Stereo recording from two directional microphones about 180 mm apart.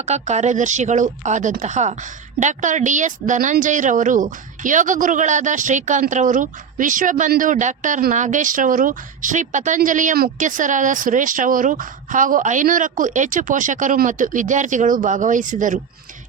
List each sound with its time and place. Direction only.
0.0 s a woman's voice: 40° right (ahead or behind)